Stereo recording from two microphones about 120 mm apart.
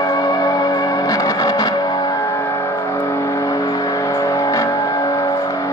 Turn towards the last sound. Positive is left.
turn(degrees=25)  # may be behind; listen again after turning